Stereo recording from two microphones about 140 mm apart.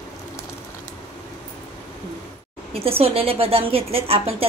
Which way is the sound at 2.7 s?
45° right (ahead or behind).